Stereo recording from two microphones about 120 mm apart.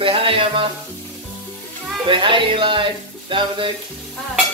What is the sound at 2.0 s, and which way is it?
Speech, 45° right (ahead or behind).